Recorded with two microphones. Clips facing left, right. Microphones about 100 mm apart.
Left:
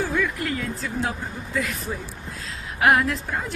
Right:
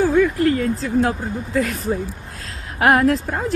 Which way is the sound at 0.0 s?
35° right (ahead or behind).